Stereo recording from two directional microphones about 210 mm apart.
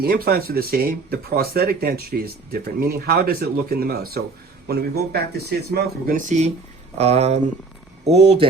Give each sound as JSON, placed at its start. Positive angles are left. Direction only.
{"t": 0.0, "sound": "speech", "side_deg": -45}